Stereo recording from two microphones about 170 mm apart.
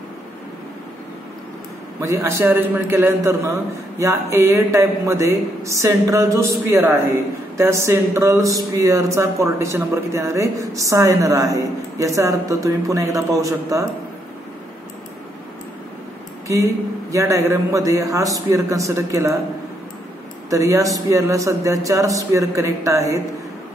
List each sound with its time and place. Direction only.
2.0 s a woman's voice: 15° right (ahead or behind)
17.1 s a woman's voice: 15° right (ahead or behind)
20.4 s a man's voice: 20° right (ahead or behind)